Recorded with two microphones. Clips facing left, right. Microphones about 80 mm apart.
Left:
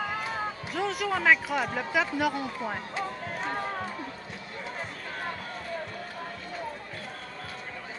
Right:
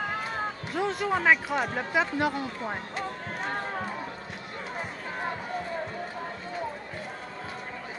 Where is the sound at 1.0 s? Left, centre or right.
Centre.